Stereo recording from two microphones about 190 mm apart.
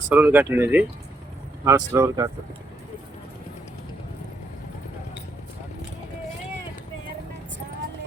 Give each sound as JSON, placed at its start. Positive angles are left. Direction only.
{"t": 0.1, "sound": "speech", "side_deg": -10}